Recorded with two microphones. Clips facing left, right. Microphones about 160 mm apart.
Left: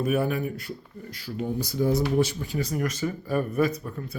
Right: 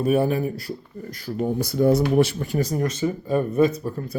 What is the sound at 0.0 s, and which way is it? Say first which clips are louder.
Speech: right 5 dB; 30° right (ahead or behind).